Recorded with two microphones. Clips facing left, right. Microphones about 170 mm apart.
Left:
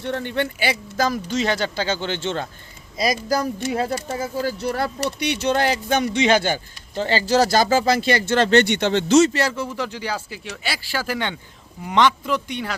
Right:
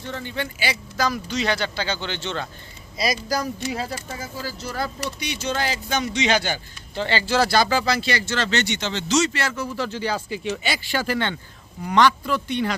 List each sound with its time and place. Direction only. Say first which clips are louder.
0.0 s speech: left 6 dB; 60° left (ahead or behind); by 9.6 s 35° left (ahead or behind)
9.7 s a man's voice: right 1 dB; 15° left (ahead or behind)